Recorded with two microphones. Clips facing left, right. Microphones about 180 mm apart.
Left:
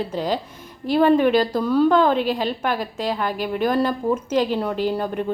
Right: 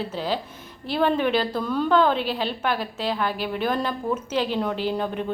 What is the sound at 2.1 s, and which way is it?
A woman's voice, 45° left (ahead or behind).